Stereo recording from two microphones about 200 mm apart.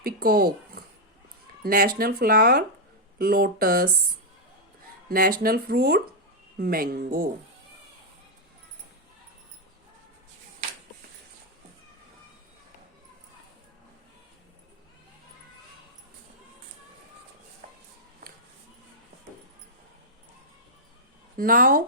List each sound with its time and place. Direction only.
0.0 s speech: 50° right (ahead or behind)
1.6 s speech: 45° right (ahead or behind)
5.0 s speech: 45° right (ahead or behind)
21.3 s speech: 45° right (ahead or behind)